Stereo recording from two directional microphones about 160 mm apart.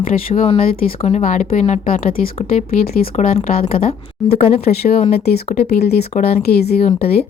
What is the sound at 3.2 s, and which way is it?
Speech, 45° left (ahead or behind).